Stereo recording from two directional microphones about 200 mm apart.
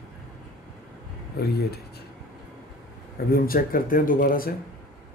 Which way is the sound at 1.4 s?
55° left (ahead or behind).